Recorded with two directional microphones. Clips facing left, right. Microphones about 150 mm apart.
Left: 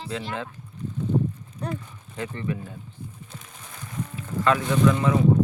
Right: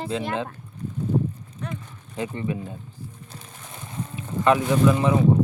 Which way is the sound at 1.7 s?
20° right (ahead or behind).